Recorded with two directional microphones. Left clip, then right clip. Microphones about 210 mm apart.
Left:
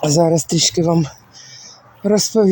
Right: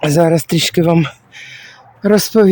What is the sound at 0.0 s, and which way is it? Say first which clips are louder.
Speech: right 2 dB; 15° right (ahead or behind).